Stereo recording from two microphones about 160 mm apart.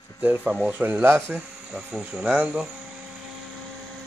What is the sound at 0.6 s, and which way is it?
Speech, 10° right (ahead or behind).